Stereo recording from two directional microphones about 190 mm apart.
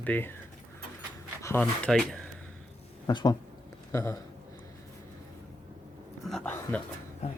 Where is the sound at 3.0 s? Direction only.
20° left (ahead or behind).